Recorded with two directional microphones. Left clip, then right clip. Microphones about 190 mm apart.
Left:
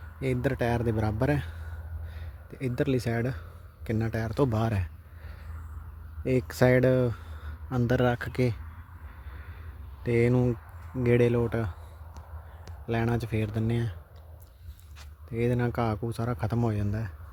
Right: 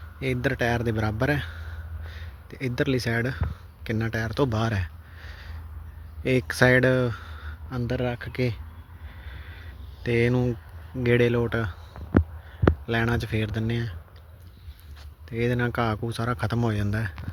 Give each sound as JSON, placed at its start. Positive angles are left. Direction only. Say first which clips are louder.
{"t": 0.2, "sound": "a man's voice", "louder": "right 3 dB", "side_deg": 10}
{"t": 7.9, "sound": "speech", "louder": "left 3 dB", "side_deg": 35}
{"t": 9.4, "sound": "crow", "louder": "right 4 dB", "side_deg": 0}
{"t": 11.0, "sound": "a man's voice", "louder": "right 2 dB", "side_deg": 5}
{"t": 12.8, "sound": "a man's voice", "louder": "right 4 dB", "side_deg": 5}
{"t": 15.3, "sound": "a man's voice", "louder": "right 3 dB", "side_deg": 10}